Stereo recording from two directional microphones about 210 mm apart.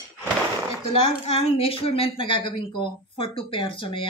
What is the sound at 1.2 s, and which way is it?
A woman's voice, 30° left (ahead or behind).